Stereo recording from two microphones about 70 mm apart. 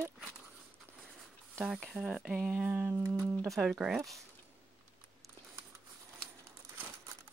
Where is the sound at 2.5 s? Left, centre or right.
Right.